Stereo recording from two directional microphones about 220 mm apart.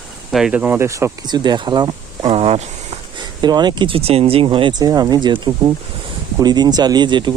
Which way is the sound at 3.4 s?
20° right (ahead or behind).